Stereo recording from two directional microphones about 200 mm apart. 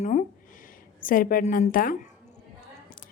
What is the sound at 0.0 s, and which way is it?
Speech, 40° left (ahead or behind).